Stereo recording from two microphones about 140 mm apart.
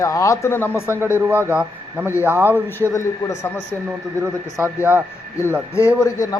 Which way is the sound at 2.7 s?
20° left (ahead or behind).